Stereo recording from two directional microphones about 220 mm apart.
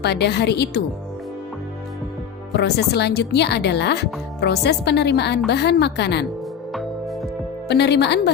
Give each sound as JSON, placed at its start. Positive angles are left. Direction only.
{"t": 0.0, "sound": "speech", "side_deg": 50}
{"t": 2.5, "sound": "speech", "side_deg": 50}
{"t": 6.7, "sound": "music", "side_deg": 0}
{"t": 7.7, "sound": "speech", "side_deg": 50}